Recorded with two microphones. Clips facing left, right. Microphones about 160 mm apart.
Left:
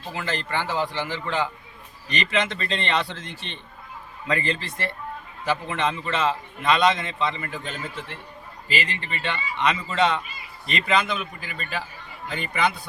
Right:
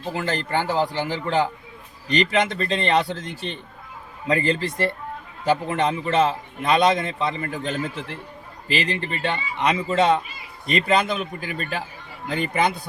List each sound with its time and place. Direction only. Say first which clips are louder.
0.2 s a man's voice: right 3 dB; 45° right (ahead or behind)